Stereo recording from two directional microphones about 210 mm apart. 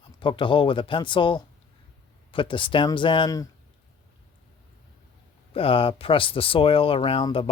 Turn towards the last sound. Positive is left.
turn(degrees=25)  # may be behind; listen again after turning